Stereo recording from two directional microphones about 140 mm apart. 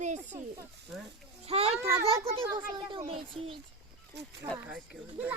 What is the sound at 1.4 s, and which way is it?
A child's voice, 50° right (ahead or behind).